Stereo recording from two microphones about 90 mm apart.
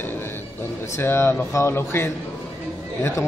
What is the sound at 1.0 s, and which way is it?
A man's voice, 25° left (ahead or behind).